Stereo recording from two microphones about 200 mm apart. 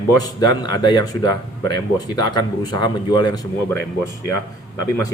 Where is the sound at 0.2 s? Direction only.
20° left (ahead or behind).